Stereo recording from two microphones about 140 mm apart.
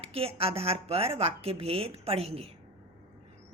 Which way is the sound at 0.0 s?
45° right (ahead or behind).